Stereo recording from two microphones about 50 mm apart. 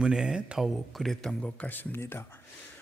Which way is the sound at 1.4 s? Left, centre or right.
Left.